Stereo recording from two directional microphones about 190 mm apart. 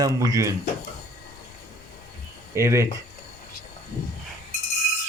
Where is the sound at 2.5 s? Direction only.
15° right (ahead or behind).